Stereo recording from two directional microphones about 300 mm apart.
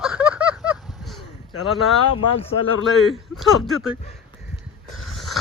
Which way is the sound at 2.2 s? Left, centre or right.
Left.